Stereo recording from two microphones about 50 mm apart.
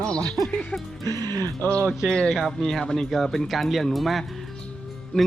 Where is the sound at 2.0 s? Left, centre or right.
Centre.